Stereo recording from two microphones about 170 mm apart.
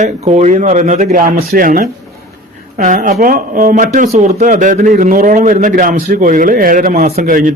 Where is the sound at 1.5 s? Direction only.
55° right (ahead or behind).